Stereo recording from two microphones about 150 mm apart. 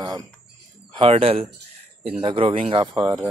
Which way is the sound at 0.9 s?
40° right (ahead or behind).